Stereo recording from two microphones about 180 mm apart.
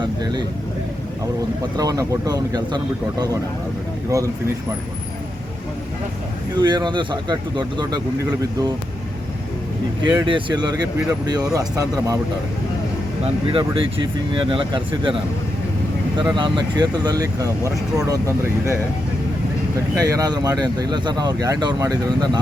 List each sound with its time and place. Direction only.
0.0 s speech: 25° right (ahead or behind)
1.7 s speech: 20° right (ahead or behind)
6.6 s speech: 25° right (ahead or behind)
10.0 s speech: 25° right (ahead or behind)
13.2 s speech: 30° right (ahead or behind)
16.3 s speech: 25° right (ahead or behind)
20.0 s speech: 20° right (ahead or behind)